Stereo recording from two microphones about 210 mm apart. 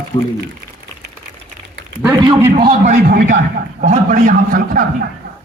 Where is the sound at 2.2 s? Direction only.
20° right (ahead or behind).